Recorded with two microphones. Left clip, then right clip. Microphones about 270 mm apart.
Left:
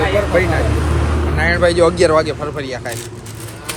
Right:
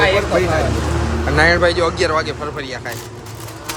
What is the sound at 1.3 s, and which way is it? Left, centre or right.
Speech, centre.